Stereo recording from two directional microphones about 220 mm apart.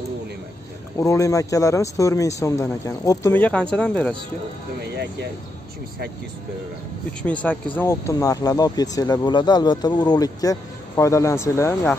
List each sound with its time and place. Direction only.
0.9 s speech: 15° left (ahead or behind)
7.7 s speech: 10° left (ahead or behind)